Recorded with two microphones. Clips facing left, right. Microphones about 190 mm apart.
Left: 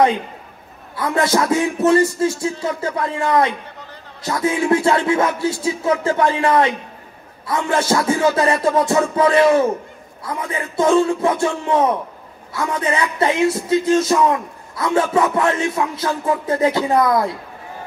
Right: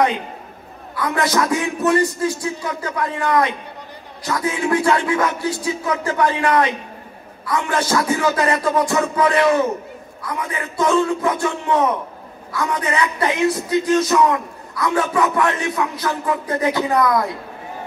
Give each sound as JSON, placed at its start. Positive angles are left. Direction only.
{"t": 0.9, "sound": "speech", "side_deg": 25}